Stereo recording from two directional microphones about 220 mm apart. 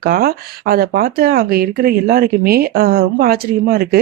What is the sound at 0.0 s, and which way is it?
Speech, 45° right (ahead or behind).